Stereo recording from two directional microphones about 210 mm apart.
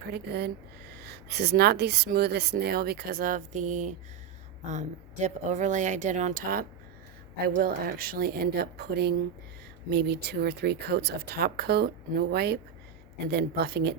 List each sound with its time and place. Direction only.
0.1 s speech: 50° right (ahead or behind)